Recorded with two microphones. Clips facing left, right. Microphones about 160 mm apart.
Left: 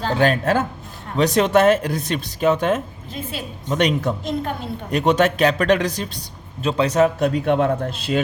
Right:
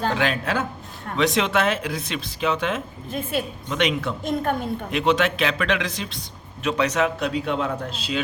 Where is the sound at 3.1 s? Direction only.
55° right (ahead or behind).